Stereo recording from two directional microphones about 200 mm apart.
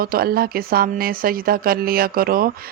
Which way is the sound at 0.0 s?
50° right (ahead or behind).